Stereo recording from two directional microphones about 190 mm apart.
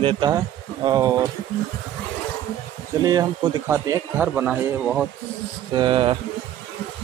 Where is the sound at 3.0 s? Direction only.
20° right (ahead or behind).